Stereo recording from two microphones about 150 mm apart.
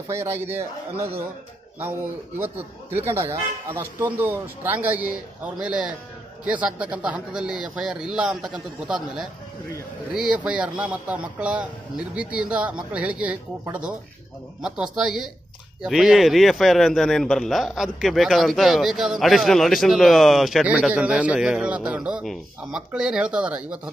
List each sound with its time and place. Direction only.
0.1 s a man's voice: 15° right (ahead or behind)